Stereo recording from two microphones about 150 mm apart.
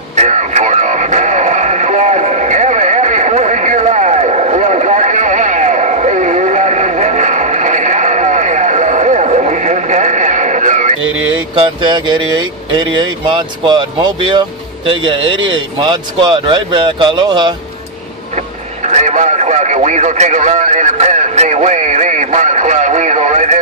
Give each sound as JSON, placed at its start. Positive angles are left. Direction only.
{"t": 0.1, "sound": "radio", "side_deg": -50}
{"t": 11.1, "sound": "music", "side_deg": -10}
{"t": 11.5, "sound": "speech", "side_deg": -30}
{"t": 18.3, "sound": "radio", "side_deg": -50}